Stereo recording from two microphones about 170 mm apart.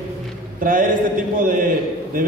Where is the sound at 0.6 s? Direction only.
55° right (ahead or behind).